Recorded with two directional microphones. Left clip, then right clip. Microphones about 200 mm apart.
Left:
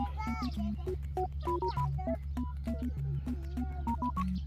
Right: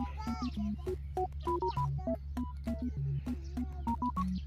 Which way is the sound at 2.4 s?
Centre (ahead or behind).